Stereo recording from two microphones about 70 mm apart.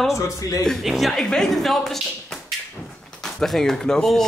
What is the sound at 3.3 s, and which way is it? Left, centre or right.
Speech, centre.